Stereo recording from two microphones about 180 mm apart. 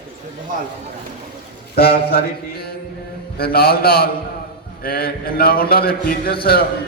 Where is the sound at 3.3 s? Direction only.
60° left (ahead or behind).